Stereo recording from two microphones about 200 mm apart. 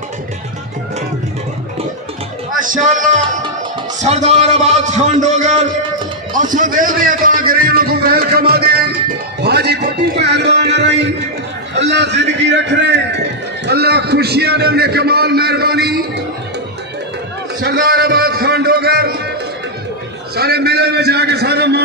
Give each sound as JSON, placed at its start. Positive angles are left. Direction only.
{"t": 2.6, "sound": "a man's voice", "side_deg": -40}
{"t": 9.4, "sound": "music", "side_deg": -55}
{"t": 11.7, "sound": "a man's voice", "side_deg": -60}
{"t": 12.2, "sound": "music", "side_deg": -60}
{"t": 13.7, "sound": "a man's voice", "side_deg": -55}
{"t": 17.6, "sound": "a man's voice", "side_deg": -50}
{"t": 20.3, "sound": "a man's voice", "side_deg": -50}